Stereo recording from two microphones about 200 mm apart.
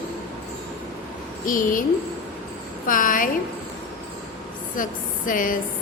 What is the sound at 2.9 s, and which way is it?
Speech, 40° left (ahead or behind).